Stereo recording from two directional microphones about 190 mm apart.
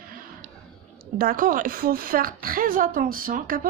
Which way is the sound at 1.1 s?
50° right (ahead or behind).